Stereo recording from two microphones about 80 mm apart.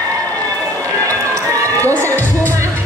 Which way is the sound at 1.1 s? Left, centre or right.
Right.